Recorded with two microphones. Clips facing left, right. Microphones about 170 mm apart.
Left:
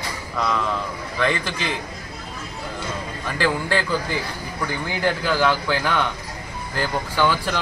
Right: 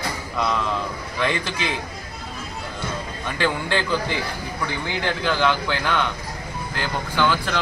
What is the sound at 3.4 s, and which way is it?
Speech, 5° left (ahead or behind).